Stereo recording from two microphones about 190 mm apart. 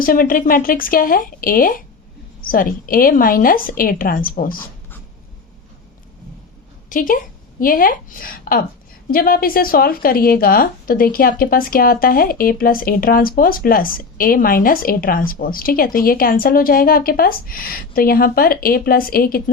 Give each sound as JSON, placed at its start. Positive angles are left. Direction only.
{"t": 0.0, "sound": "speech", "side_deg": 50}
{"t": 6.9, "sound": "a woman's voice", "side_deg": 45}